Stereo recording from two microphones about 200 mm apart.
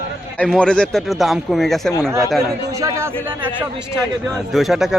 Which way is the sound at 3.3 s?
10° right (ahead or behind).